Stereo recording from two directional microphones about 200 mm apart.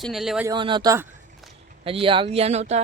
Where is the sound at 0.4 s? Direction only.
25° right (ahead or behind).